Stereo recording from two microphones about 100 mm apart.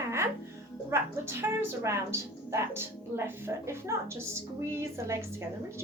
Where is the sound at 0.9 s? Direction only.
25° right (ahead or behind).